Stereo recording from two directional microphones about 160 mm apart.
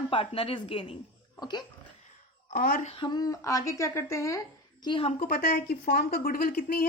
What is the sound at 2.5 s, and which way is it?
Speech, 65° left (ahead or behind).